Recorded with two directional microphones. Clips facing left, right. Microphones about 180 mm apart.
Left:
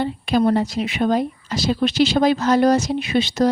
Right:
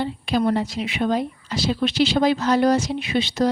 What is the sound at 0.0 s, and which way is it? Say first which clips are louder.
A woman's voice: left 3 dB; 50° left (ahead or behind).